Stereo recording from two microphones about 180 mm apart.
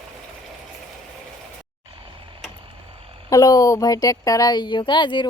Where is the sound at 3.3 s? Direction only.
20° left (ahead or behind).